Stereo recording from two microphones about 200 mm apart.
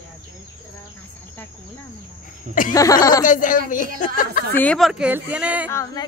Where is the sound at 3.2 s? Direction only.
40° left (ahead or behind).